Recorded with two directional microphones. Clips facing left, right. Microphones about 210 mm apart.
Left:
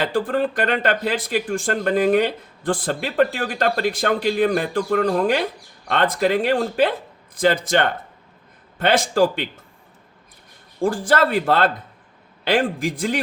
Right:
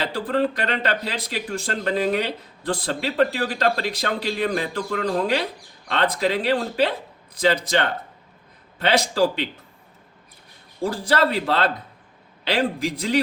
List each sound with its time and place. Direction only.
0.0 s speech: 50° left (ahead or behind)
10.8 s speech: 50° left (ahead or behind)